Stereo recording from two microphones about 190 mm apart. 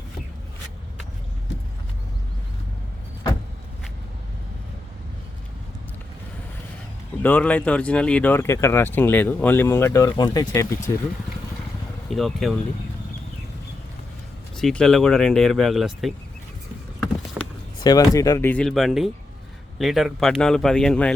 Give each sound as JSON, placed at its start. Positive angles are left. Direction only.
{"t": 7.2, "sound": "speech", "side_deg": 10}
{"t": 12.1, "sound": "speech", "side_deg": 0}
{"t": 14.5, "sound": "speech", "side_deg": 5}
{"t": 17.4, "sound": "a sound", "side_deg": -10}
{"t": 17.8, "sound": "speech", "side_deg": 20}